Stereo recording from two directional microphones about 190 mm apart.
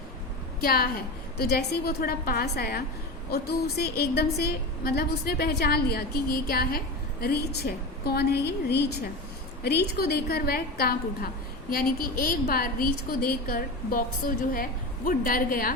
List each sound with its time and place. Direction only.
0.6 s a woman's voice: 50° left (ahead or behind)